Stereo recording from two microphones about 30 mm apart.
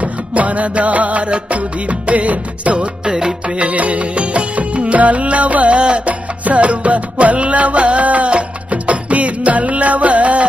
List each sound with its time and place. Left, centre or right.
0.0 s music: right
3.1 s music: right
3.4 s music: right
4.9 s music: right
5.8 s music: right
6.4 s music: right